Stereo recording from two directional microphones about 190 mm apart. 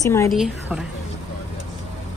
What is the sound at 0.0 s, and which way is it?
Speech, 15° left (ahead or behind).